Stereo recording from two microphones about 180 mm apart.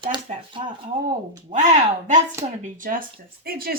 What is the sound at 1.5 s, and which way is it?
Speech, 40° right (ahead or behind).